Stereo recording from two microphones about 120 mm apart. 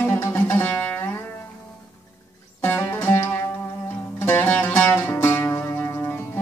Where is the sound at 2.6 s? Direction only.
20° left (ahead or behind).